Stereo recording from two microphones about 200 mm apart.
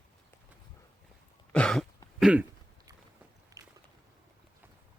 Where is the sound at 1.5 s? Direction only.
5° left (ahead or behind).